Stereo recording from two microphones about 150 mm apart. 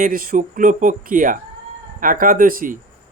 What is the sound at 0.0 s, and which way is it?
Speech, 70° right (ahead or behind).